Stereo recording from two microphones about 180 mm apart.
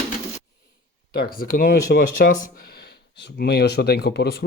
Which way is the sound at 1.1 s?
55° left (ahead or behind).